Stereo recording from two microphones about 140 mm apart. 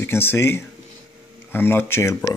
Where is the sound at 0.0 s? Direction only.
15° left (ahead or behind).